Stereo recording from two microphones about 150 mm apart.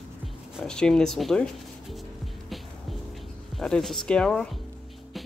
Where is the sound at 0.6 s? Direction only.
5° left (ahead or behind).